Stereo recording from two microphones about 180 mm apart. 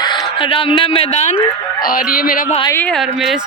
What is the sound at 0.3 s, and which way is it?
A man's voice, 30° left (ahead or behind).